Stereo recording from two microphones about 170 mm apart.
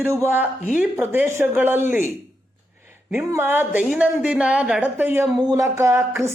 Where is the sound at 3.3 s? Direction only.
15° right (ahead or behind).